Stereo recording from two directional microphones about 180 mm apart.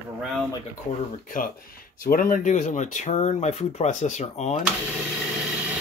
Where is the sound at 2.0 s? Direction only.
50° left (ahead or behind).